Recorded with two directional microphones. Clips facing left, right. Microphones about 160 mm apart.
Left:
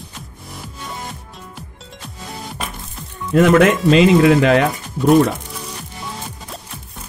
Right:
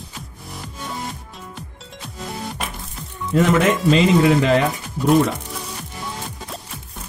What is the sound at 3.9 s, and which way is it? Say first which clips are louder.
Speech: left 3 dB; 70° left (ahead or behind).